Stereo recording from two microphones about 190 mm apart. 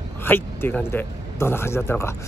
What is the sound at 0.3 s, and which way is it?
A man's voice, 10° left (ahead or behind).